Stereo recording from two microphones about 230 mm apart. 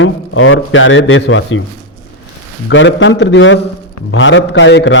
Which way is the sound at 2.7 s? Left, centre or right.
Left.